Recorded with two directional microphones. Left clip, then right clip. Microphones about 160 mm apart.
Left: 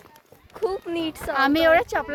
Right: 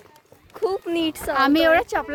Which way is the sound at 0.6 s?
55° right (ahead or behind).